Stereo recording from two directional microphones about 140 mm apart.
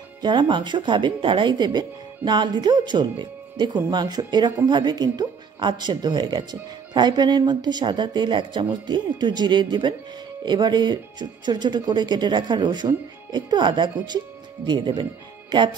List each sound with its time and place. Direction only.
0.2 s speech: 35° right (ahead or behind)